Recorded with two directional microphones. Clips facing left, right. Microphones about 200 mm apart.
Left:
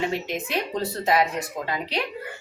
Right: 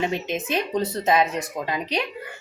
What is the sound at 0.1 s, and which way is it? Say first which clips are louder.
Speech: right 2 dB; 20° right (ahead or behind).